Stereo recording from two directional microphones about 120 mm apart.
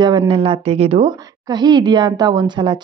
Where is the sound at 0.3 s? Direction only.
45° right (ahead or behind).